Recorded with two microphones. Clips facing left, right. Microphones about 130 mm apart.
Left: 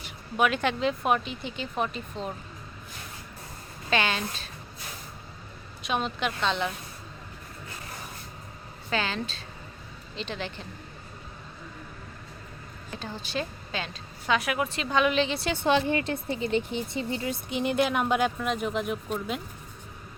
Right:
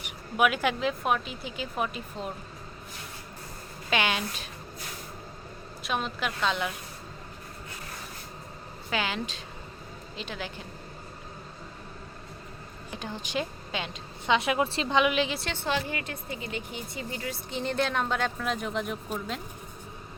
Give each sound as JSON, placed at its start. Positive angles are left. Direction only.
{"t": 0.0, "sound": "speech", "side_deg": -10}
{"t": 3.8, "sound": "a woman's voice", "side_deg": -15}
{"t": 5.8, "sound": "speech", "side_deg": 0}
{"t": 8.9, "sound": "a woman's voice", "side_deg": -15}
{"t": 12.9, "sound": "a woman's voice", "side_deg": -15}
{"t": 14.9, "sound": "a woman's voice", "side_deg": -10}
{"t": 15.6, "sound": "a woman's voice", "side_deg": 25}